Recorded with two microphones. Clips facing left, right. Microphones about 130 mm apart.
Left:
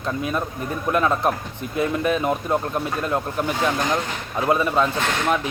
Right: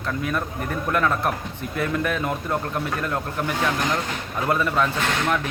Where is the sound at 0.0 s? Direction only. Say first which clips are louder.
Left 2 dB; 20° left (ahead or behind).